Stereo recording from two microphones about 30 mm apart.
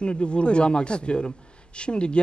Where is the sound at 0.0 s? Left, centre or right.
Left.